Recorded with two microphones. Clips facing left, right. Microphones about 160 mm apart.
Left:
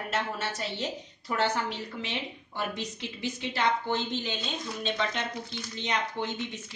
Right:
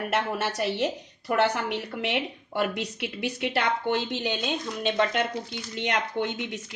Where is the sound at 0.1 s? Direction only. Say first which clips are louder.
Right 4 dB; 70° right (ahead or behind).